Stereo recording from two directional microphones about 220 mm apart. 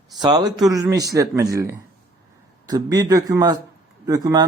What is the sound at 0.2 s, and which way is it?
Speech, 20° right (ahead or behind).